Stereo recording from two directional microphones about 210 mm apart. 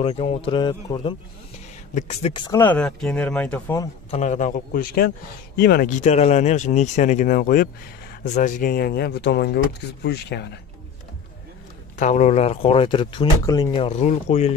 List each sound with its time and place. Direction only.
0.0 s speech: 30° left (ahead or behind)
2.6 s speech: 5° left (ahead or behind)
4.1 s speech: 35° left (ahead or behind); by 10.6 s 50° left (ahead or behind)
12.0 s speech: 35° left (ahead or behind)